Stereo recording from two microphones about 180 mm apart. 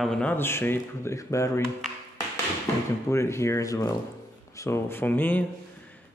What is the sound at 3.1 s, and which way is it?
Speech, 15° left (ahead or behind).